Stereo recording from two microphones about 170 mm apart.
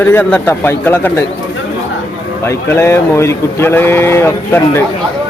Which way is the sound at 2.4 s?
15° left (ahead or behind).